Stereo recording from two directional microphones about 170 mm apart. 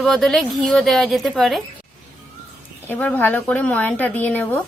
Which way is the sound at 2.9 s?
10° left (ahead or behind).